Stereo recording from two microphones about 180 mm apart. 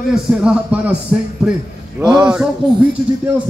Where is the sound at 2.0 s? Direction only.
20° right (ahead or behind).